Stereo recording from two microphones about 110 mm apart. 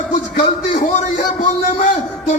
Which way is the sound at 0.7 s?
90° left.